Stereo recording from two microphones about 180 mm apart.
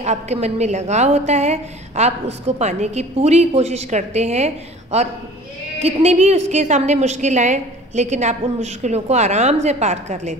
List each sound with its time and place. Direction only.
0.0 s a woman's voice: 40° right (ahead or behind)
5.8 s a woman's voice: 35° right (ahead or behind)